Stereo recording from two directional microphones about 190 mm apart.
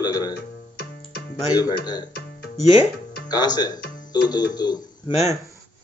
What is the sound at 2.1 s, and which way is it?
Music, 55° left (ahead or behind).